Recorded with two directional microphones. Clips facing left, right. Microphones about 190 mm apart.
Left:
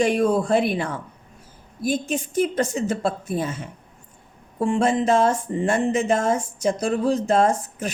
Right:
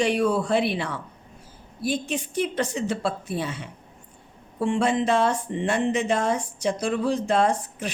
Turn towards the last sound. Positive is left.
turn(degrees=45)  # may be behind; listen again after turning